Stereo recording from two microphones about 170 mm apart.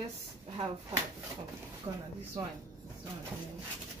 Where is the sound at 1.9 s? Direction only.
30° right (ahead or behind).